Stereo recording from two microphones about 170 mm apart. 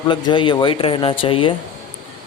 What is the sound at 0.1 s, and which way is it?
A man's voice, 30° left (ahead or behind).